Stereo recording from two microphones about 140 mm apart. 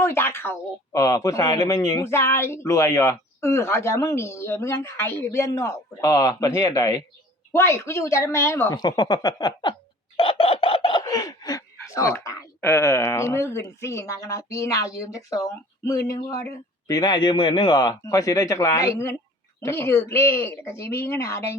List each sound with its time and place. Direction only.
0.0 s speech: 15° left (ahead or behind)
8.7 s speech: 30° left (ahead or behind)
10.2 s chicken: 40° left (ahead or behind)
11.0 s a sound: 25° left (ahead or behind)
12.5 s speech: 15° left (ahead or behind)